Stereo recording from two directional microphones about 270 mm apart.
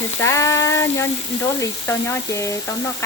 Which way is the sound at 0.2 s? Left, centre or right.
Centre.